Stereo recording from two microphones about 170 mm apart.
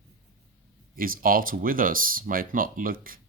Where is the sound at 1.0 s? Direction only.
55° right (ahead or behind).